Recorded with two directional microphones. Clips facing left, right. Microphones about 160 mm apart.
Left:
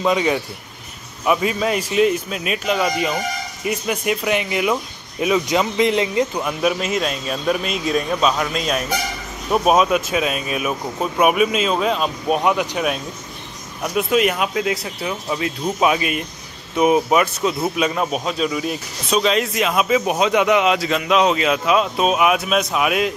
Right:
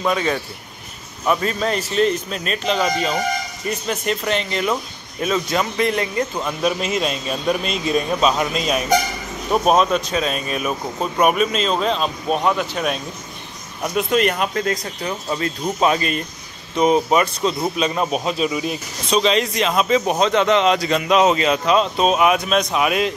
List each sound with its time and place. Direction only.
0.0 s speech: 15° left (ahead or behind)